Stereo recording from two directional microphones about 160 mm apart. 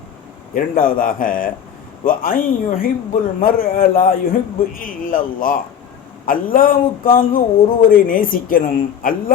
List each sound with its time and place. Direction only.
0.5 s speech: 60° left (ahead or behind)